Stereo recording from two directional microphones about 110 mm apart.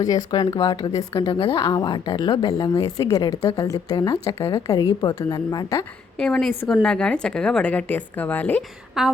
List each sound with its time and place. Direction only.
0.0 s a woman's voice: 35° left (ahead or behind)
6.1 s a woman's voice: 10° left (ahead or behind)
9.0 s a woman's voice: centre (ahead or behind)